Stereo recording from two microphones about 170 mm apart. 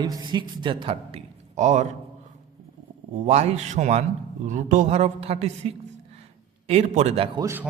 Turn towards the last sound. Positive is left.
turn(degrees=-15)  # may be behind; listen again after turning